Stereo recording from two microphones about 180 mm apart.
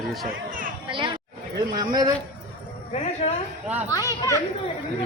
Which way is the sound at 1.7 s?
20° right (ahead or behind).